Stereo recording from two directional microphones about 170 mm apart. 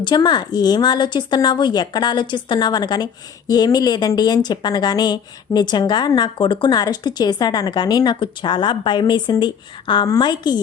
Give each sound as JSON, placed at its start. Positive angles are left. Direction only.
{"t": 0.0, "sound": "a woman's voice", "side_deg": 25}